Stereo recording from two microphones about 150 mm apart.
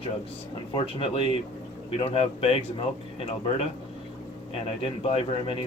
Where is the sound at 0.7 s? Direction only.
40° left (ahead or behind).